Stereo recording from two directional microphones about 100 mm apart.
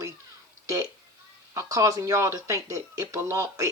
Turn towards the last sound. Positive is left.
turn(degrees=-30)  # may be behind; listen again after turning